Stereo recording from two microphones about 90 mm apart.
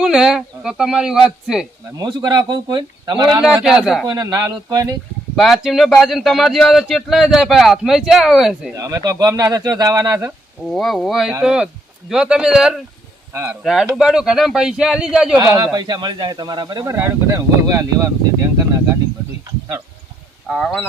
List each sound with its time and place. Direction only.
0.0 s speech: 5° right (ahead or behind)
2.0 s speech: 50° right (ahead or behind)
3.5 s speech: 10° right (ahead or behind)
4.0 s speech: 45° right (ahead or behind)
5.4 s speech: centre (ahead or behind)
8.7 s speech: 40° right (ahead or behind)
10.6 s speech: centre (ahead or behind)
13.3 s speech: 25° right (ahead or behind)
13.6 s speech: centre (ahead or behind)
15.7 s speech: 50° right (ahead or behind)
16.9 s speech: 35° right (ahead or behind)